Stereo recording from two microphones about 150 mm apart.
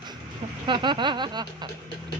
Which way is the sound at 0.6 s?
30° right (ahead or behind).